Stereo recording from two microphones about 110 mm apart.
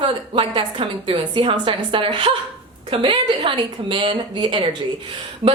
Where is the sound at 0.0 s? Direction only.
45° right (ahead or behind).